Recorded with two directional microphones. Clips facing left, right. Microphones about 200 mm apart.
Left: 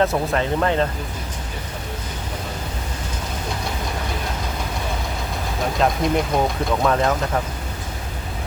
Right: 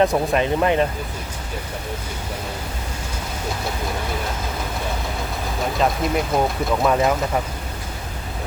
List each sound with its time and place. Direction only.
0.0 s speech: 15° right (ahead or behind)
5.8 s speech: centre (ahead or behind)